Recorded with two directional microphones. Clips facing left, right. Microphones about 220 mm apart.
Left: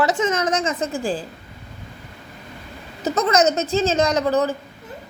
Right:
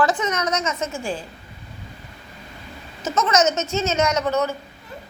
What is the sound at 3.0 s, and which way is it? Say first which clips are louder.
A woman's voice: left 2 dB; 35° left (ahead or behind).